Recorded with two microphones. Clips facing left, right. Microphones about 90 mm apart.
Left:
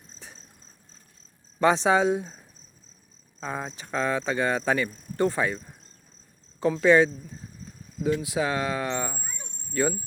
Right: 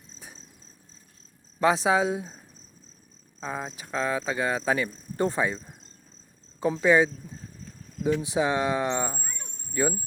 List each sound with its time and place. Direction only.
1.5 s speech: 5° right (ahead or behind)
3.4 s speech: centre (ahead or behind)
5.2 s speech: 20° right (ahead or behind)
6.7 s speech: 10° right (ahead or behind)
8.0 s speech: 20° right (ahead or behind)
9.1 s a sound: 5° left (ahead or behind)
9.7 s speech: 10° right (ahead or behind)